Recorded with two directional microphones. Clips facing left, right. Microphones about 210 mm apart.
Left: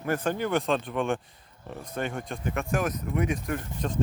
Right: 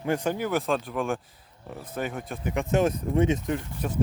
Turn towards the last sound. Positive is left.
turn(degrees=-10)  # may be behind; listen again after turning